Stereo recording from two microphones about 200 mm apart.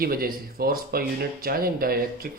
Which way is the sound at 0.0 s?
50° right (ahead or behind).